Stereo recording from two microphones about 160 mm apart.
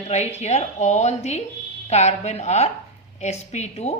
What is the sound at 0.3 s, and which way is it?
A woman's voice, 45° left (ahead or behind).